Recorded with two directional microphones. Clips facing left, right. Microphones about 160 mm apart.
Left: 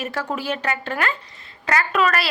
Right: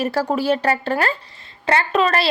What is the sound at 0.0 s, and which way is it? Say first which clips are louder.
A woman's voice: right 7 dB; 35° right (ahead or behind).